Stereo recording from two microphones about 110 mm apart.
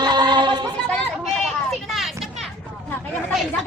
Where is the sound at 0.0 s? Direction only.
40° right (ahead or behind).